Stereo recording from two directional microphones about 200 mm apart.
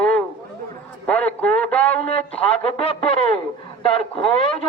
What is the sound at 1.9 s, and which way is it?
A man's voice, 30° left (ahead or behind).